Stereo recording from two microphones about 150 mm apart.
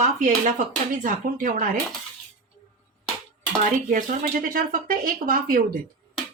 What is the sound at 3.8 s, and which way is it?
Speech, 60° right (ahead or behind).